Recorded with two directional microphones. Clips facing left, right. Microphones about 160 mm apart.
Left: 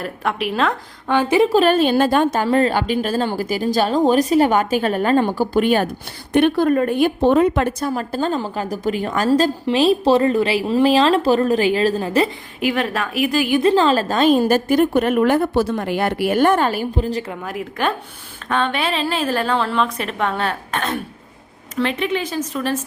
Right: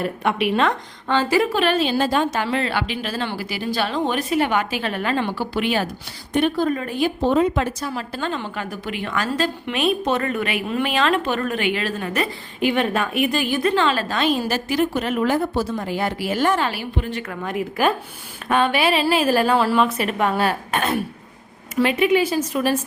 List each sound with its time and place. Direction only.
0.0 s a woman's voice: centre (ahead or behind)
1.1 s a woman's voice: 20° left (ahead or behind)
1.5 s a woman's voice: 45° left (ahead or behind)
6.3 s speech: 65° left (ahead or behind); by 12.3 s 30° left (ahead or behind)
12.5 s a woman's voice: centre (ahead or behind)
13.6 s a woman's voice: 35° left (ahead or behind)
17.4 s a woman's voice: centre (ahead or behind)